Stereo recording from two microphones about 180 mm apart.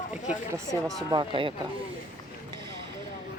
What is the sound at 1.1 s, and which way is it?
Speech, 25° right (ahead or behind).